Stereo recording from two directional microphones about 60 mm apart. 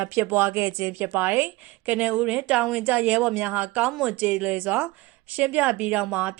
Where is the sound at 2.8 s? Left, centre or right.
Right.